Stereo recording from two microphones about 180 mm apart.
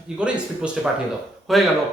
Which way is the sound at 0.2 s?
5° right (ahead or behind).